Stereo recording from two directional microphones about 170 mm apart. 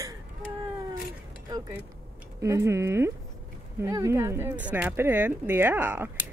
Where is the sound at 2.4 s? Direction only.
15° right (ahead or behind).